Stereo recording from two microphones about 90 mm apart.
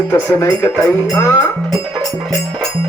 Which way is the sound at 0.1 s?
30° left (ahead or behind).